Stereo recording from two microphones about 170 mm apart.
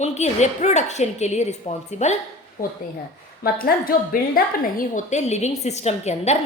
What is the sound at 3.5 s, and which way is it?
A woman's voice, 60° left (ahead or behind).